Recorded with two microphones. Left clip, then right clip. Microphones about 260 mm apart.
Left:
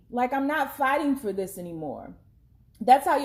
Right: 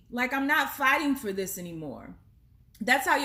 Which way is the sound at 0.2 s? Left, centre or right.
Right.